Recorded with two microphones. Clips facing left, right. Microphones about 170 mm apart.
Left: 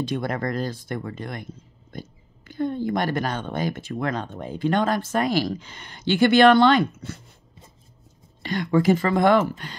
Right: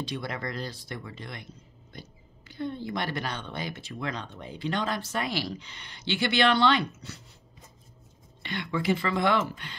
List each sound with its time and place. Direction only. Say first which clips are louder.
0.0 s speech: left 8 dB; 50° left (ahead or behind)
8.4 s speech: left 10 dB; 40° left (ahead or behind)